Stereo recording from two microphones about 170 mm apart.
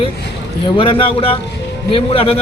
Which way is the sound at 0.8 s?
30° left (ahead or behind).